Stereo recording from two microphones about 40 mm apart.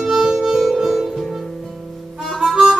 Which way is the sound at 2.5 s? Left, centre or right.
Centre.